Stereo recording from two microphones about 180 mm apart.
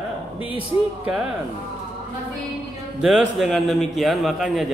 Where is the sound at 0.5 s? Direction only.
5° right (ahead or behind).